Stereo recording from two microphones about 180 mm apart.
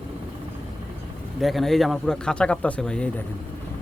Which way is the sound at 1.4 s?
Centre (ahead or behind).